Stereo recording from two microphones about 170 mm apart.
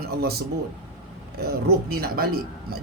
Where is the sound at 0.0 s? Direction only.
65° right (ahead or behind).